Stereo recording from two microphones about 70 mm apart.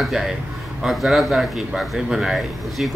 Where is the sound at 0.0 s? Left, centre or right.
Centre.